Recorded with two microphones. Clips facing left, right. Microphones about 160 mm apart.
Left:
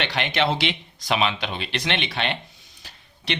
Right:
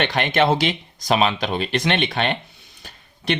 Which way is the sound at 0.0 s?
50° right (ahead or behind).